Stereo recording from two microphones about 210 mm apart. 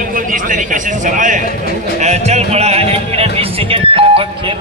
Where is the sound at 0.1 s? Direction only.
40° right (ahead or behind).